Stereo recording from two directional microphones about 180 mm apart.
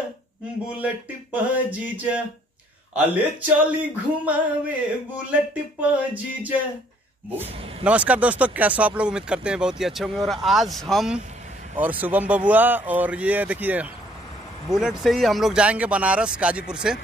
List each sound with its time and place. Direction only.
1.3 s speech: 10° right (ahead or behind)
3.4 s speech: 10° right (ahead or behind)
7.8 s speech: 5° right (ahead or behind)
11.7 s speech: 10° right (ahead or behind)